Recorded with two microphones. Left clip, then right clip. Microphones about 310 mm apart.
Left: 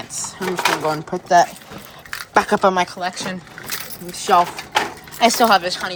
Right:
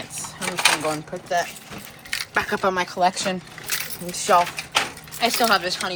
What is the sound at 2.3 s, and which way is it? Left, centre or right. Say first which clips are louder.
Speech: left 7 dB; centre.